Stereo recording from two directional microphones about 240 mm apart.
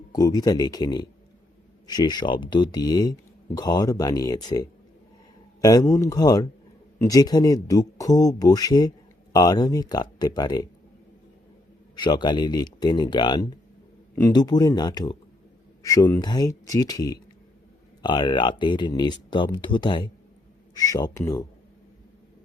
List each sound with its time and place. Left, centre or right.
0.1 s speech: centre
11.9 s speech: centre